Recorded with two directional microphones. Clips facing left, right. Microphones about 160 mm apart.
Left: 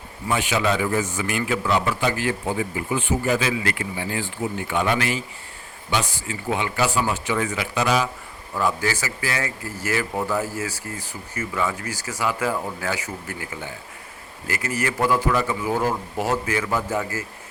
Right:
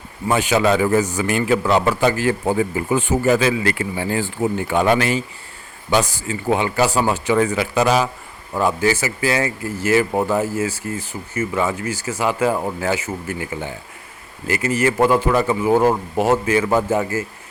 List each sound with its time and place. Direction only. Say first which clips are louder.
0.3 s speech: right 6 dB; 40° right (ahead or behind)
8.6 s speech: right 6 dB; 25° right (ahead or behind)